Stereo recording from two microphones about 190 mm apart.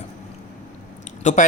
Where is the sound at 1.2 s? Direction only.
40° left (ahead or behind).